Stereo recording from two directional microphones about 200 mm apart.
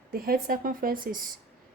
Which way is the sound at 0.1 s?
45° right (ahead or behind).